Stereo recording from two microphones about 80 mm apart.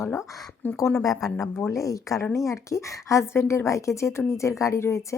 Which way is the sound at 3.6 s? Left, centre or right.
Left.